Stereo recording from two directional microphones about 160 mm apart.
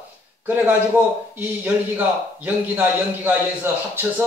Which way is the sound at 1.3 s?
10° right (ahead or behind).